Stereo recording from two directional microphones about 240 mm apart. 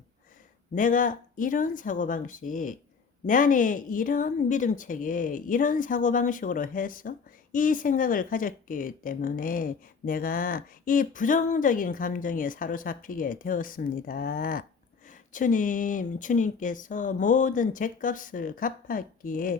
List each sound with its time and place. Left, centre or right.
0.8 s speech: left